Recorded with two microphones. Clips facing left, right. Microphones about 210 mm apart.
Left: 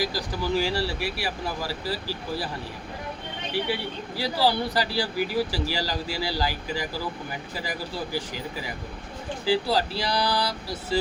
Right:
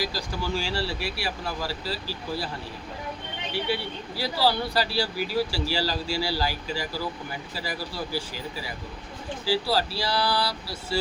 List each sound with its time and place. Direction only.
0.1 s speech: 15° left (ahead or behind)
4.2 s speech: 15° left (ahead or behind)
9.5 s speech: 20° left (ahead or behind)